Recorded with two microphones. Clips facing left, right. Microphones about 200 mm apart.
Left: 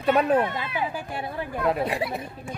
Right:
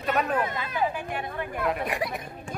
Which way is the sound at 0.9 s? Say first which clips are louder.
Left 1 dB; 30° left (ahead or behind).